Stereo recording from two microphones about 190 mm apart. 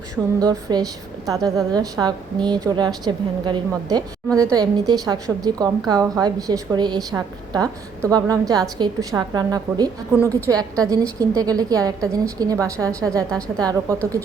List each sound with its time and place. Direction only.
0.3 s a woman's voice: 20° right (ahead or behind)